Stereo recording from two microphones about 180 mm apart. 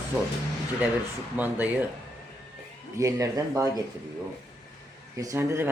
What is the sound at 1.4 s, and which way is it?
Speech, 10° right (ahead or behind).